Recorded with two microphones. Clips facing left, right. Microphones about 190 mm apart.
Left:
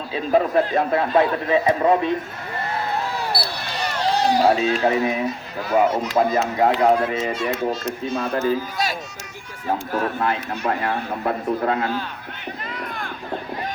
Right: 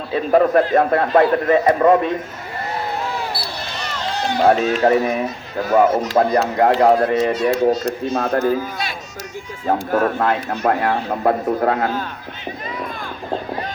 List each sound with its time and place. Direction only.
0.1 s a man's voice: 50° right (ahead or behind)
4.0 s run: 35° left (ahead or behind)
4.6 s a man's voice: 40° right (ahead or behind)
9.6 s a man's voice: 50° right (ahead or behind)